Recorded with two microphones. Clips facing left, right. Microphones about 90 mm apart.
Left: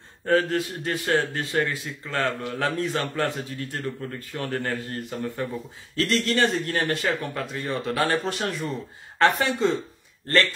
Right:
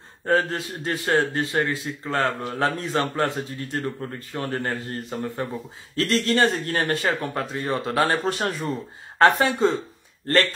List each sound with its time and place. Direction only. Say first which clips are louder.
0.2 s a man's voice: even; 30° right (ahead or behind)